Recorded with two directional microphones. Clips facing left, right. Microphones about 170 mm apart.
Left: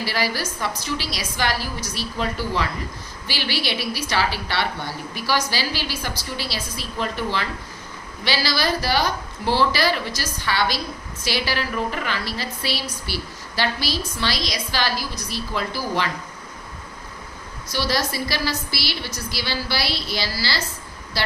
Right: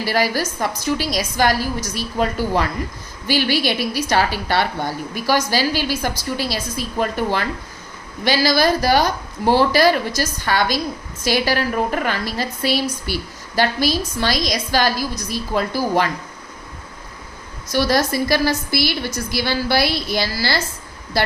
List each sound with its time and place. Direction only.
0.0 s a woman's voice: 45° right (ahead or behind)
17.7 s a woman's voice: 50° right (ahead or behind)